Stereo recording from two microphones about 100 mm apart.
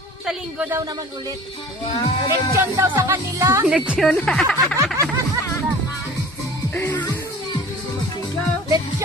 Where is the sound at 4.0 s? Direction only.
10° left (ahead or behind).